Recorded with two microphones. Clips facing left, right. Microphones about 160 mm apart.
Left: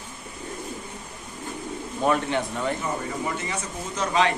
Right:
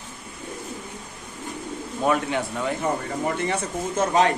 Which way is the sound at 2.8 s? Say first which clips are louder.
Right 3 dB; 60° right (ahead or behind).